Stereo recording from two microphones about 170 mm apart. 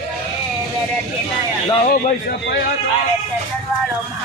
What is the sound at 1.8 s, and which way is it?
Speech, 55° left (ahead or behind).